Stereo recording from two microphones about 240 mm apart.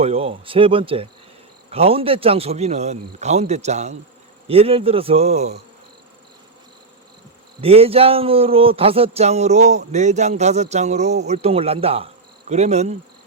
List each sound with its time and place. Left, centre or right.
0.0 s speech: right
7.6 s speech: right